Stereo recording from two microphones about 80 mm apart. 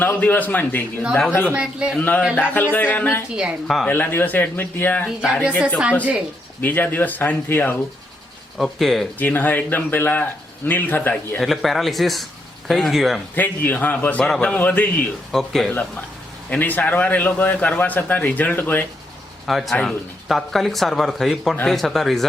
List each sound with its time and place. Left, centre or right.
0.0 s a man's voice: left
1.5 s speech: centre
2.0 s a man's voice: left
5.2 s speech: centre
6.6 s a man's voice: left
8.5 s speech: centre
9.1 s a man's voice: left
11.3 s speech: centre
13.3 s a man's voice: left
14.3 s speech: centre
14.5 s a man's voice: centre
15.3 s speech: centre
16.5 s a man's voice: left
19.5 s speech: centre